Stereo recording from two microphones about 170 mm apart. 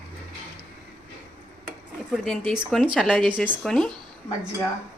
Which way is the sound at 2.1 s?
Centre (ahead or behind).